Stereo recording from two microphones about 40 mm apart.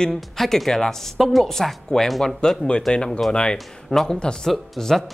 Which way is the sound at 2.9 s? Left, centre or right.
Left.